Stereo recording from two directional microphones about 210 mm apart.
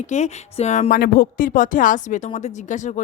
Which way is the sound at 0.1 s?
30° left (ahead or behind).